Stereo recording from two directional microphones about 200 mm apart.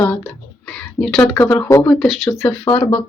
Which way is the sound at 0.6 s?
5° left (ahead or behind).